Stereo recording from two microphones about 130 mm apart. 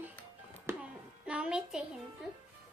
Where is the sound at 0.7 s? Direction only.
20° right (ahead or behind).